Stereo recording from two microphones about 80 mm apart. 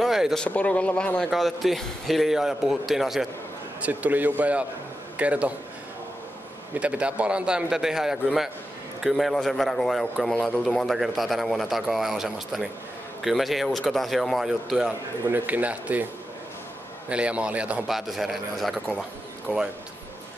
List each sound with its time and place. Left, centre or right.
0.0 s a sound: centre
0.5 s speech: centre
1.3 s a man's voice: centre
3.8 s a man's voice: right
6.8 s a man's voice: centre
15.3 s a man's voice: right
17.1 s a man's voice: centre
17.8 s a man's voice: centre